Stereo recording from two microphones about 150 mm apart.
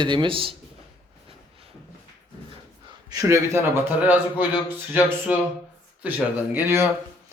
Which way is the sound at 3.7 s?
10° right (ahead or behind).